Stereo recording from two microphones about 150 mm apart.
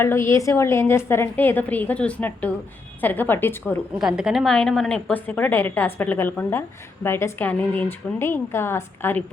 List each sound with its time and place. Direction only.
0.0 s a woman's voice: 15° left (ahead or behind)
3.9 s a woman's voice: 5° right (ahead or behind); by 9.2 s 15° left (ahead or behind)